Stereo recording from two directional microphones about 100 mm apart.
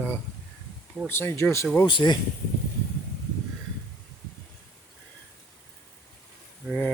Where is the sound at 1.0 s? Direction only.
25° left (ahead or behind).